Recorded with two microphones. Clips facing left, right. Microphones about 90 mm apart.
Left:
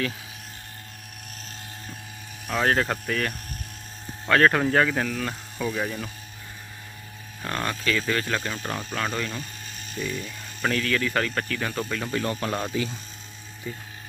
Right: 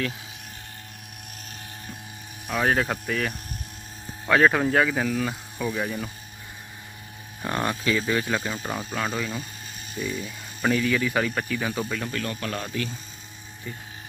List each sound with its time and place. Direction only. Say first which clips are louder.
2.5 s speech: even; 5° right (ahead or behind)
7.4 s speech: right 2 dB; 15° right (ahead or behind)
12.1 s speech: left 3 dB; 30° left (ahead or behind)